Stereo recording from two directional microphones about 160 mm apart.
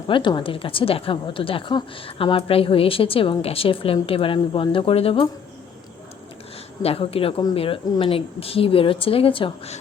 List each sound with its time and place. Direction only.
0.1 s a woman's voice: 30° left (ahead or behind)
6.8 s a woman's voice: 35° left (ahead or behind)